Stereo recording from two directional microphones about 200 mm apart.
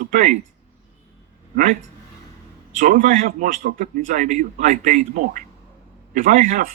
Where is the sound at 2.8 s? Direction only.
40° right (ahead or behind).